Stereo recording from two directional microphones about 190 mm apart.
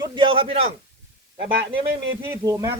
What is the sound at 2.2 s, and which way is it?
Speech, 15° right (ahead or behind).